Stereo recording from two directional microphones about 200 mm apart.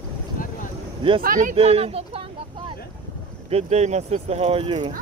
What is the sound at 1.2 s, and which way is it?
Speech, 45° right (ahead or behind).